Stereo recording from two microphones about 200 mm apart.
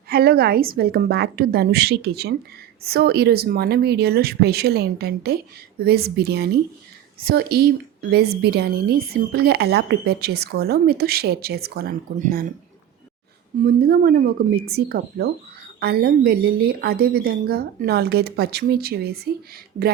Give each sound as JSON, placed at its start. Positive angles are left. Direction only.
{"t": 0.1, "sound": "speech", "side_deg": -50}
{"t": 13.6, "sound": "speech", "side_deg": -50}